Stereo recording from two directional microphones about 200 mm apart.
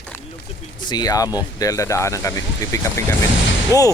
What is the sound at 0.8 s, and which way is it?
Speech, 20° left (ahead or behind).